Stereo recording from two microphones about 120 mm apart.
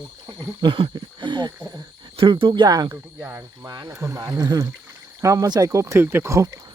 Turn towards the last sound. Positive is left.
turn(degrees=-25)  # may be behind; listen again after turning